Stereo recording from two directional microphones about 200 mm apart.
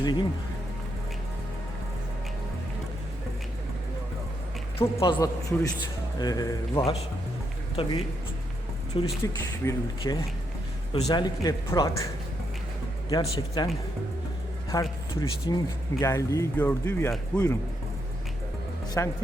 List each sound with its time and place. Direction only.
0.0 s speech: 25° left (ahead or behind)
4.8 s speech: 15° left (ahead or behind)
9.0 s speech: 15° left (ahead or behind)
10.9 s a man's voice: 30° left (ahead or behind)
11.2 s speech: 20° left (ahead or behind)
13.1 s speech: 20° left (ahead or behind)
14.7 s speech: 15° left (ahead or behind)
19.0 s speech: 15° left (ahead or behind)